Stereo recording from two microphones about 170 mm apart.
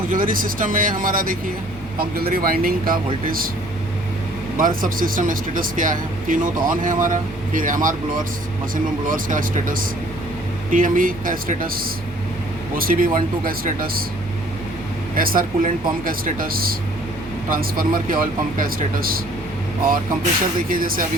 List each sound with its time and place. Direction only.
0.1 s speech: 55° right (ahead or behind)
4.5 s speech: 55° right (ahead or behind)
15.1 s speech: 55° right (ahead or behind)
20.7 s speech: 55° right (ahead or behind)